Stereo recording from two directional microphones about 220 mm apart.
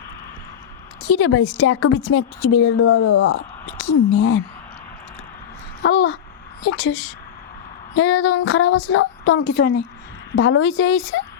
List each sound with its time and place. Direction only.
1.1 s a woman's voice: 65° left (ahead or behind)
5.8 s a woman's voice: 55° left (ahead or behind)
10.3 s a woman's voice: 60° left (ahead or behind)